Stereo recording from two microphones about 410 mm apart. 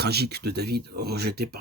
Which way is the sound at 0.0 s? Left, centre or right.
Right.